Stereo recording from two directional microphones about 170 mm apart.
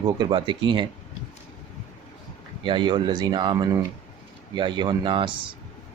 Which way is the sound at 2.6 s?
25° right (ahead or behind).